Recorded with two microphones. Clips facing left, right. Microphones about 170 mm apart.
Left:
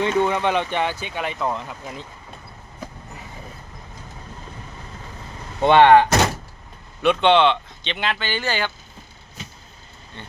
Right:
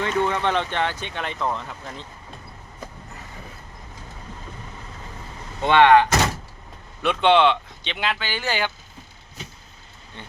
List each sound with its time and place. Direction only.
0.0 s speech: 15° left (ahead or behind)
5.6 s speech: 30° left (ahead or behind)
7.0 s speech: 5° right (ahead or behind)
10.2 s speech: 15° right (ahead or behind)